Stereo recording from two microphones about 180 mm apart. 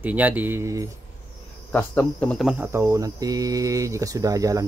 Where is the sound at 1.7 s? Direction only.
10° left (ahead or behind).